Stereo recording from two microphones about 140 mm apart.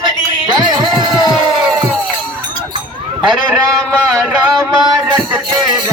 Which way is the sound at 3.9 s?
5° left (ahead or behind).